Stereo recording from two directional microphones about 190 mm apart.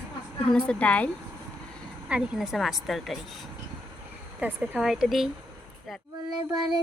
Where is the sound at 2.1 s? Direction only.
5° right (ahead or behind).